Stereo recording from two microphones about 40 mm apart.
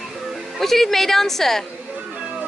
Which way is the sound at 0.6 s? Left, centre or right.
Centre.